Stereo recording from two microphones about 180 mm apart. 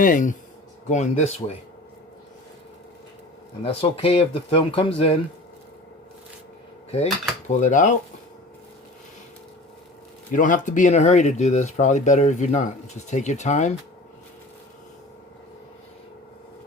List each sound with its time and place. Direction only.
0.0 s cutlery: 45° left (ahead or behind)
0.9 s speech: 40° left (ahead or behind)
3.6 s speech: 30° left (ahead or behind)
6.9 s cutlery: 40° left (ahead or behind)
10.3 s speech: 45° left (ahead or behind)